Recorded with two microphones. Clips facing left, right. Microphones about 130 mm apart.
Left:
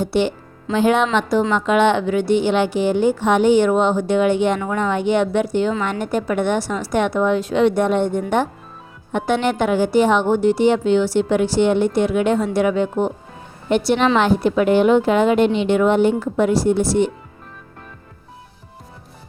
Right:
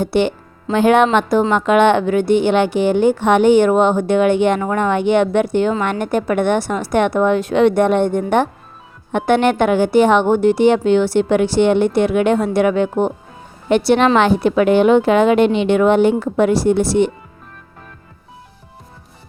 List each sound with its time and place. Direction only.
0.0 s a woman's voice: 60° right (ahead or behind)